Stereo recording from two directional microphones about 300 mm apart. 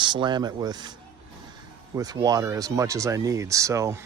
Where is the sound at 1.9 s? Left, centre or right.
Centre.